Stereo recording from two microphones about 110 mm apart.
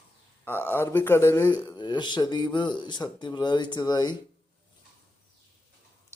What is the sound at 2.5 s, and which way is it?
Speech, 45° left (ahead or behind).